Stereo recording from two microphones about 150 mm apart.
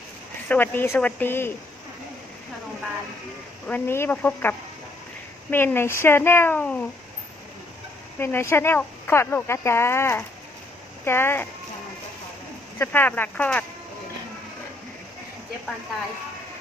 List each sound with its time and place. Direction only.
0.4 s speech: 10° left (ahead or behind)
3.7 s speech: 15° left (ahead or behind)
8.2 s speech: 15° left (ahead or behind)
12.8 s speech: 15° left (ahead or behind)